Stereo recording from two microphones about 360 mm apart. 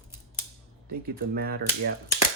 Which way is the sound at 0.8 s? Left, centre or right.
Right.